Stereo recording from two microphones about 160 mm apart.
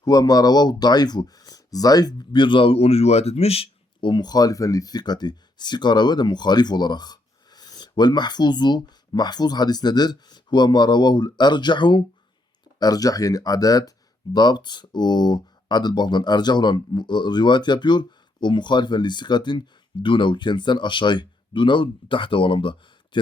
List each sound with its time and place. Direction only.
0.0 s speech: 25° left (ahead or behind)